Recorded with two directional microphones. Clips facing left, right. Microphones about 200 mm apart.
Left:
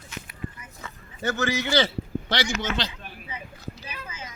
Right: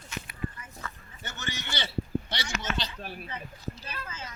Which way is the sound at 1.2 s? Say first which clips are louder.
Left 13 dB; 90° left.